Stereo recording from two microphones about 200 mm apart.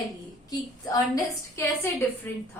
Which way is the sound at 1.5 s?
10° left (ahead or behind).